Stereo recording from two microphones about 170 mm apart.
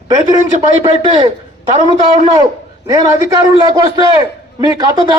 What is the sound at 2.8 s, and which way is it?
A man's voice, 20° right (ahead or behind).